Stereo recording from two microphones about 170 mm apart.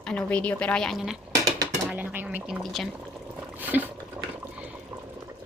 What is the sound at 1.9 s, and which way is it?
Speech, 10° right (ahead or behind).